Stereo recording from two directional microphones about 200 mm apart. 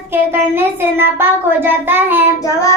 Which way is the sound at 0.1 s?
10° right (ahead or behind).